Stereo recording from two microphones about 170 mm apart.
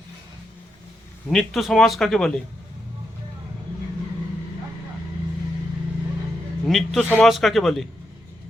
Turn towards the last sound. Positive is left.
turn(degrees=0)  # may be behind; listen again after turning